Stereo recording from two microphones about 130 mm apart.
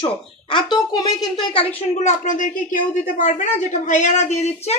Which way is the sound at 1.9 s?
70° left (ahead or behind).